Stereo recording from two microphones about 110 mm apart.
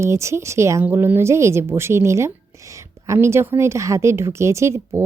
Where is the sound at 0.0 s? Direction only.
25° right (ahead or behind).